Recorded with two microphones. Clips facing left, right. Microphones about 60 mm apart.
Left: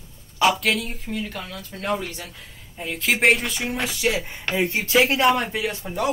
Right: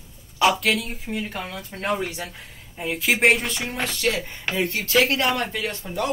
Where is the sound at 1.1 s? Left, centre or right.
Centre.